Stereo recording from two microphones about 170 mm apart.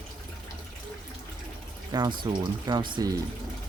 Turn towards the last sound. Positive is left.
turn(degrees=-25)  # may be behind; listen again after turning